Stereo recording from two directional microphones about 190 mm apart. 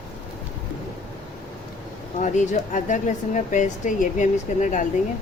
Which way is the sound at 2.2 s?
40° left (ahead or behind).